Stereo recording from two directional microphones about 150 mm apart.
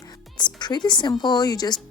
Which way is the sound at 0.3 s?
30° left (ahead or behind).